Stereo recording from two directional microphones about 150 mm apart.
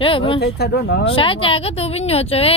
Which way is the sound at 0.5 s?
90° left.